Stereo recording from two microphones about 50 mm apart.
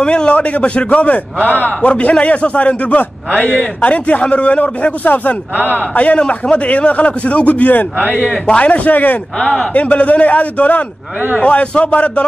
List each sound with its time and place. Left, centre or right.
0.0 s a man's voice: centre
9.4 s a man's voice: left